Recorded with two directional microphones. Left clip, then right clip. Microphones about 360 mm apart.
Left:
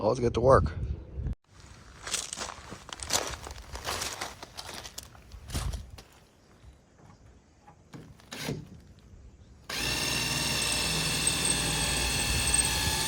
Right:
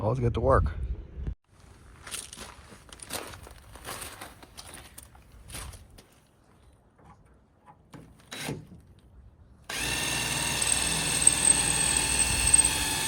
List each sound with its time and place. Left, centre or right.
0.0 s speech: centre
2.0 s a sound: centre
3.0 s crumpling: centre
4.6 s a sound: centre
7.9 s rub: centre
9.6 s drill: centre